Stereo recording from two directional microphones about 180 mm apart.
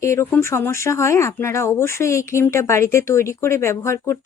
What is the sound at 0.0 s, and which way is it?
Speech, 15° left (ahead or behind).